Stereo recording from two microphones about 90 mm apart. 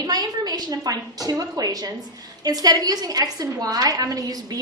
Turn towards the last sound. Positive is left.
turn(degrees=-45)  # may be behind; listen again after turning